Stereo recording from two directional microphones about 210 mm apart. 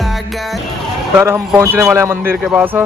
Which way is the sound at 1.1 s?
10° right (ahead or behind).